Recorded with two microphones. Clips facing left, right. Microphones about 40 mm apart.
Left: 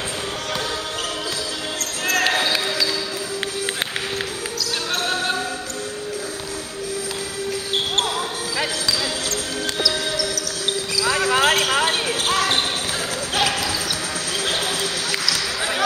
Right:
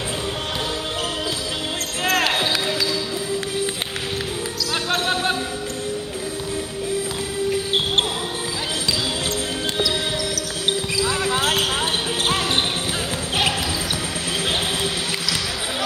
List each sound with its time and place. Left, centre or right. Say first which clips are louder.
2.0 s basketball bounce: even; right
4.9 s basketball bounce: right 2 dB; right
11.1 s basketball bounce: left 6 dB; left